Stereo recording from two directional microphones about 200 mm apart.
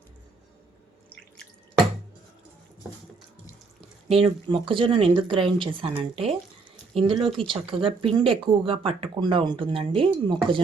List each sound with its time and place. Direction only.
4.2 s speech: 25° right (ahead or behind)